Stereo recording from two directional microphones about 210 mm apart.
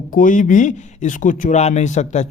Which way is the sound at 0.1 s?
40° left (ahead or behind).